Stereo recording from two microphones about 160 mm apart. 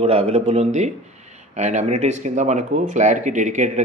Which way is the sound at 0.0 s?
40° right (ahead or behind).